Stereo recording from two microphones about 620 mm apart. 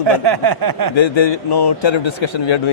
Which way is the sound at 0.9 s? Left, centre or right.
Left.